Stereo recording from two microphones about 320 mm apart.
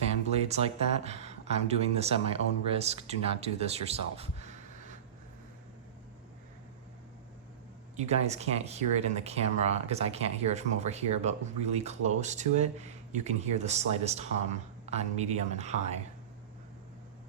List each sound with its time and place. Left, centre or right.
0.3 s speech: centre
7.9 s speech: right